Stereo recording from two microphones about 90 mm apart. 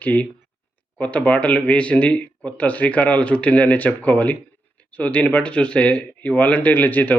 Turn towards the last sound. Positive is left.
turn(degrees=20)  # may be behind; listen again after turning